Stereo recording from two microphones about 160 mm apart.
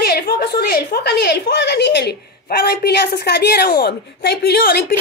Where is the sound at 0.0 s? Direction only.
85° left.